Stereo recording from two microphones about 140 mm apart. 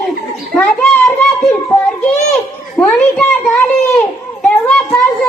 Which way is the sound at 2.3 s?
5° left (ahead or behind).